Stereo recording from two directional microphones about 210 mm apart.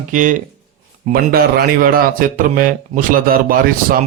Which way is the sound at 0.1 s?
35° right (ahead or behind).